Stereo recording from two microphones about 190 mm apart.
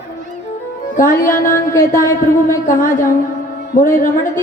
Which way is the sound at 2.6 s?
45° left (ahead or behind).